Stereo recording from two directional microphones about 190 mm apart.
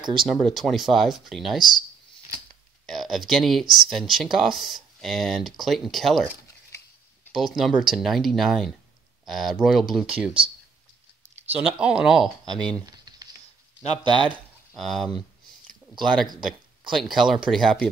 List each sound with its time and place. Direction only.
0.0 s speech: 25° right (ahead or behind)
0.3 s speech: centre (ahead or behind)
2.9 s speech: centre (ahead or behind)
7.3 s speech: centre (ahead or behind)
11.5 s speech: 5° right (ahead or behind)
12.7 s a sound: 20° right (ahead or behind)
14.0 s speech: 25° right (ahead or behind)
14.8 s speech: centre (ahead or behind)